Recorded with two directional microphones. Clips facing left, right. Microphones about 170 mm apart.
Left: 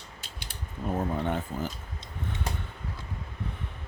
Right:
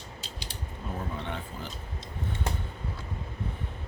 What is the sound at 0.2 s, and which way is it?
Mechanisms, 55° left (ahead or behind).